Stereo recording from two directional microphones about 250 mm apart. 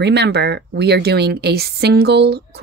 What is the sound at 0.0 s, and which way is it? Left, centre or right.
Speech, right.